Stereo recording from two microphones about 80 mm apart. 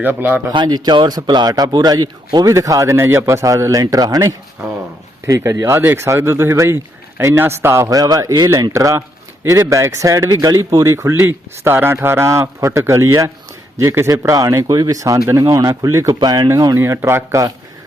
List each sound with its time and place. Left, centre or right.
0.0 s speech: right
0.5 s a man's voice: right
2.6 s a man's voice: right
7.9 s a man's voice: right
10.2 s speech: right
10.8 s a man's voice: right
16.2 s a man's voice: right
16.7 s a man's voice: right